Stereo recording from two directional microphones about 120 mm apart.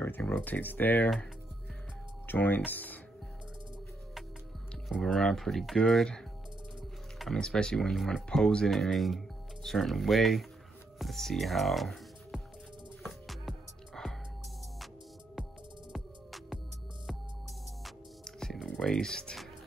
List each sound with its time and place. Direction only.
0.0 s speech: 15° left (ahead or behind)
2.2 s speech: 15° left (ahead or behind)
4.8 s speech: centre (ahead or behind)
13.0 s music: centre (ahead or behind)
15.9 s music: 5° right (ahead or behind)
17.8 s music: 5° left (ahead or behind)